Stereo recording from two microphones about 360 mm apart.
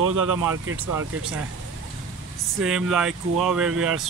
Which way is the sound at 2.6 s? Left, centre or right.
Centre.